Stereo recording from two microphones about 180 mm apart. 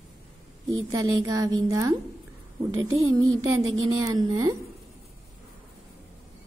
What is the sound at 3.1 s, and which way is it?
A woman's voice, 20° right (ahead or behind).